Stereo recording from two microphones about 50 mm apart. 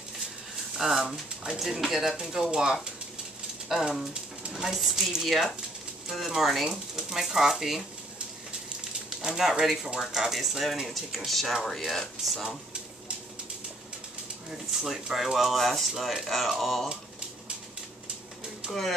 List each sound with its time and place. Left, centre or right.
0.7 s speech: centre
4.1 s a sound: centre
4.6 s speech: centre
9.2 s speech: centre
14.7 s speech: centre
18.7 s speech: centre